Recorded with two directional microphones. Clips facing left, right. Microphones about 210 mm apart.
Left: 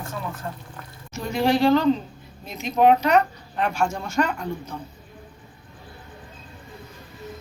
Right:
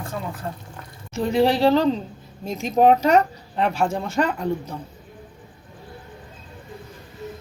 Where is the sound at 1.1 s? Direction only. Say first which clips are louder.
Right 3 dB; 30° right (ahead or behind).